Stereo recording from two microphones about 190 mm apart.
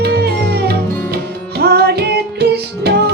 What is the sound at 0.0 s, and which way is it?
Music, 55° right (ahead or behind).